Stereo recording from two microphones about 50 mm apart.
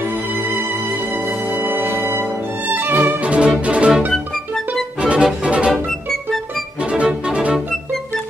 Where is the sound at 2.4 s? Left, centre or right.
Right.